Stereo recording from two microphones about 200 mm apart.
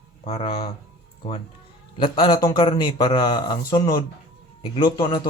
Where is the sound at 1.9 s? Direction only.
25° left (ahead or behind).